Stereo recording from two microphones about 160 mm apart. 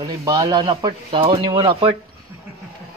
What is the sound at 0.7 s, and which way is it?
Speech, 35° right (ahead or behind).